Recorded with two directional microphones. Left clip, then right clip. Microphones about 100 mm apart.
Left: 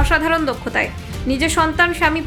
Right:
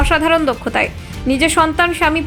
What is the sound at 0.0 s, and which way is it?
A woman's voice, 40° right (ahead or behind).